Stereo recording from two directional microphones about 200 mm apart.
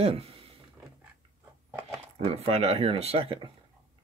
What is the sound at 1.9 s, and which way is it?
Speech, 30° right (ahead or behind).